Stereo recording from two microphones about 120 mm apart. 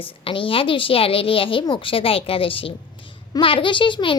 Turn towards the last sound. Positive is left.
turn(degrees=45)  # may be behind; listen again after turning